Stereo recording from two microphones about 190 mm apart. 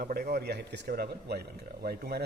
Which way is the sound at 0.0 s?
50° right (ahead or behind).